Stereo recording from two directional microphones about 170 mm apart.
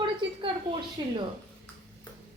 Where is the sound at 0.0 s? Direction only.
30° right (ahead or behind).